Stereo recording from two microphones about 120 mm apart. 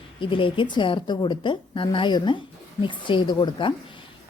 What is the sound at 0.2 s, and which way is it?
A woman's voice, 45° left (ahead or behind).